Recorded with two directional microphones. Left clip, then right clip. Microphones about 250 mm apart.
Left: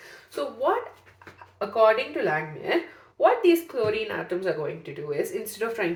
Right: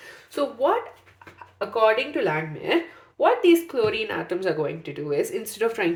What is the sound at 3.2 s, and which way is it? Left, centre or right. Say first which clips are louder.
Speech: right 2 dB; right.